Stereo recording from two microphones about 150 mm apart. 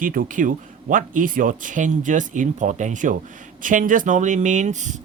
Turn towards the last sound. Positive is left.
turn(degrees=-55)  # may be behind; listen again after turning